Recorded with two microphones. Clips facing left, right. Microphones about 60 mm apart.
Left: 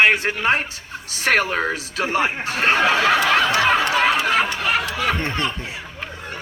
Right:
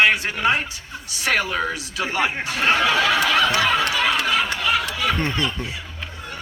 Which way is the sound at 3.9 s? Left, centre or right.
Left.